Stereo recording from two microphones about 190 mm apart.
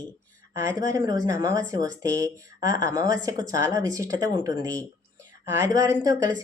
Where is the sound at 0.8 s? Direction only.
20° right (ahead or behind).